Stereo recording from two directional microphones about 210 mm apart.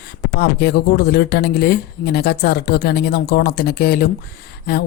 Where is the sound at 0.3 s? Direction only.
50° left (ahead or behind).